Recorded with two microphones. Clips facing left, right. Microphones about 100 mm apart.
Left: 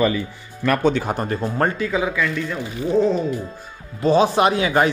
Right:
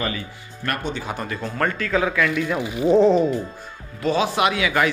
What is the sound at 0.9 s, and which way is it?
Speech, 45° left (ahead or behind).